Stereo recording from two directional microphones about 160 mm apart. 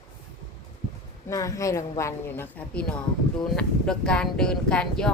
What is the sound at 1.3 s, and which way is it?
A woman's voice, 20° left (ahead or behind).